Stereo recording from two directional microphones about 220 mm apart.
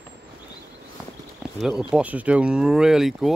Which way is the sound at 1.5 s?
Centre (ahead or behind).